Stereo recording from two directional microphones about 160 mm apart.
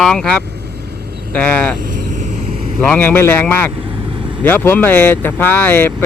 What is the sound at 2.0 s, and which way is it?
Vehicle, 50° right (ahead or behind).